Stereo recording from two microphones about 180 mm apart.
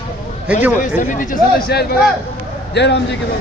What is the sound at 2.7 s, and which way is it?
Speech, 75° left (ahead or behind).